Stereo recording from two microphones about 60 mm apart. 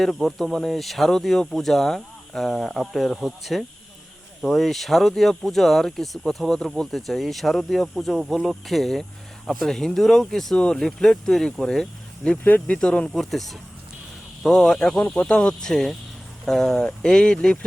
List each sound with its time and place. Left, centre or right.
0.0 s speech: centre
12.4 s speech: left
12.7 s speech: centre
13.1 s speech: centre